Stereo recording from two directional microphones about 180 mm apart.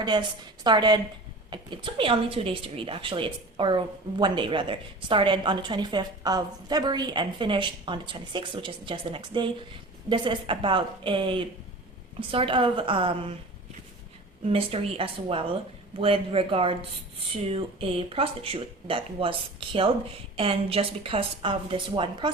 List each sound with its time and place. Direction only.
0.0 s a woman's voice: 25° right (ahead or behind)
14.5 s speech: 30° right (ahead or behind)